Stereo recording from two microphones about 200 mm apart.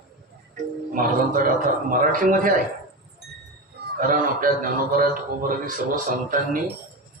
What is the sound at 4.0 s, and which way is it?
A man's voice, 45° right (ahead or behind).